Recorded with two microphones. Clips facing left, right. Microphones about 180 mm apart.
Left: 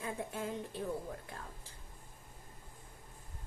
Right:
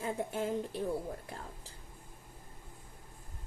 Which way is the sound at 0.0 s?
30° right (ahead or behind).